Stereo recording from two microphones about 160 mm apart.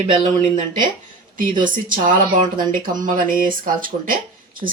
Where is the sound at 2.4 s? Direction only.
60° right (ahead or behind).